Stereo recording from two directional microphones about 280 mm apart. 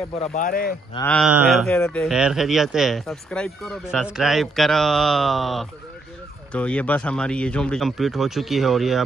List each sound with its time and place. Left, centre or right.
0.2 s speech: left
0.9 s speech: centre